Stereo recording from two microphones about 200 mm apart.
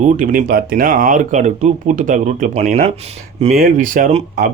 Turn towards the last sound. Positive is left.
turn(degrees=-40)  # may be behind; listen again after turning